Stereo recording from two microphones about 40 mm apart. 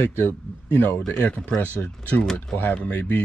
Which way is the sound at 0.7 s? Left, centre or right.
Left.